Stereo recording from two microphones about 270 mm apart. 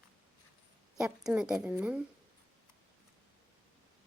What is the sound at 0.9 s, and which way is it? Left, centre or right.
Speech, centre.